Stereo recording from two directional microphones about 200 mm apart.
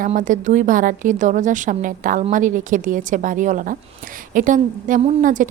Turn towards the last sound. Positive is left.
turn(degrees=-40)  # may be behind; listen again after turning